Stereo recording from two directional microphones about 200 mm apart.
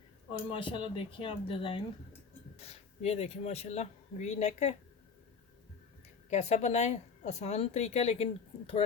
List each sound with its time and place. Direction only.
0.4 s a woman's voice: 25° left (ahead or behind)
6.3 s a woman's voice: 35° left (ahead or behind)